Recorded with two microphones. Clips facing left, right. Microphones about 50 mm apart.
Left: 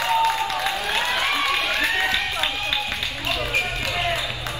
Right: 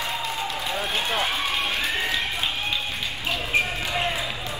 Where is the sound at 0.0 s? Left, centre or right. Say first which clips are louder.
Left 8 dB; left.